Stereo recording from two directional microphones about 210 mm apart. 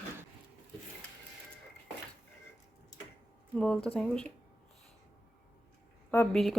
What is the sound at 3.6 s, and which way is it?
Speech, 5° left (ahead or behind).